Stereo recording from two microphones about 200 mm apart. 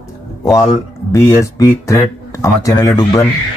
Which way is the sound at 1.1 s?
15° left (ahead or behind).